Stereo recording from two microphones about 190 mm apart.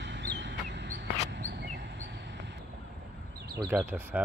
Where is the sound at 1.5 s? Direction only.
65° right (ahead or behind).